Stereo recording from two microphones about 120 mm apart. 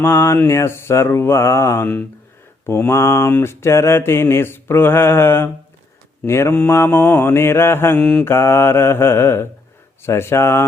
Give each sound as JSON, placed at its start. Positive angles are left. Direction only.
{"t": 0.0, "sound": "mantra", "side_deg": 20}
{"t": 7.9, "sound": "mantra", "side_deg": 5}
{"t": 8.2, "sound": "mantra", "side_deg": 20}